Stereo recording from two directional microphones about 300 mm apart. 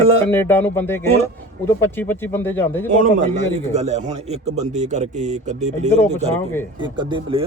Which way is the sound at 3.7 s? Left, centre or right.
Right.